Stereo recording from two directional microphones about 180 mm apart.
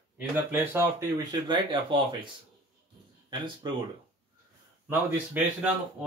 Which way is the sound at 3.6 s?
25° right (ahead or behind).